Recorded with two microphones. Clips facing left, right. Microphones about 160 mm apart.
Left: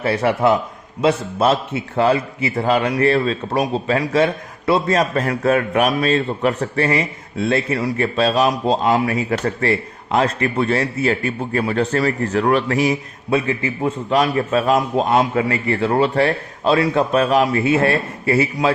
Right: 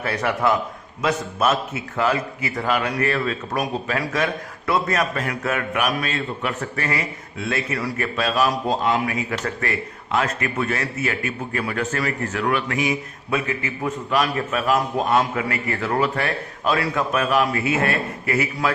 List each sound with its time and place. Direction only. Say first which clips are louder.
0.0 s a man's voice: left 5 dB; 30° left (ahead or behind)
8.9 s a man's voice: left 5 dB; 35° left (ahead or behind)